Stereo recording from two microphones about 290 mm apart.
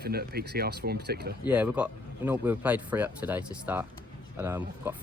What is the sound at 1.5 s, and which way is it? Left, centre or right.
Speech, centre.